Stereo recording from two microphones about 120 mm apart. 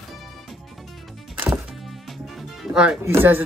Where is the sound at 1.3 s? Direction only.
15° right (ahead or behind).